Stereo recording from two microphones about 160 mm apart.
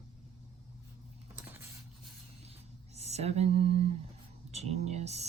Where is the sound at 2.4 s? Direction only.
40° right (ahead or behind).